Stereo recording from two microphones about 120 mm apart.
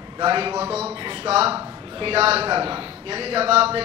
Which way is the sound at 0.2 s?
45° right (ahead or behind).